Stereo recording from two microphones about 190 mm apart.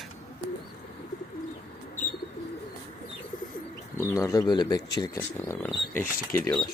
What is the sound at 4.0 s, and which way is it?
Speech, 15° left (ahead or behind).